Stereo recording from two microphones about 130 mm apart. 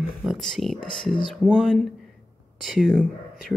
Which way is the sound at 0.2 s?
Centre (ahead or behind).